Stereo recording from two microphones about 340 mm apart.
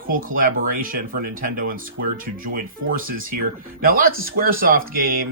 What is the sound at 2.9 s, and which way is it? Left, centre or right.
Speech, right.